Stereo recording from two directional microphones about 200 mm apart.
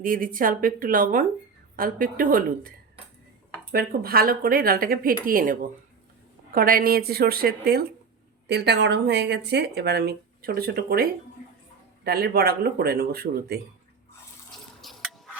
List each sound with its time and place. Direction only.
0.0 s speech: 45° right (ahead or behind)
14.5 s water: centre (ahead or behind)